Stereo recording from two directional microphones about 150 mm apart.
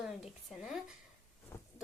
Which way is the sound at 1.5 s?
20° left (ahead or behind).